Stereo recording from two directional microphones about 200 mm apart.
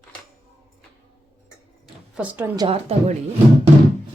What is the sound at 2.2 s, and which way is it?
Speech, 10° right (ahead or behind).